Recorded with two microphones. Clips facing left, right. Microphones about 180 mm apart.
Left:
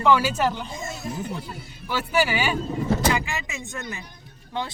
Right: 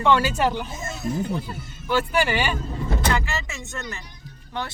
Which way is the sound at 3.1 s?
15° left (ahead or behind).